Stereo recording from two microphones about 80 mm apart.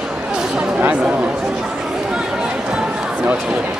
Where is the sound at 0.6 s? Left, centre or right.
Centre.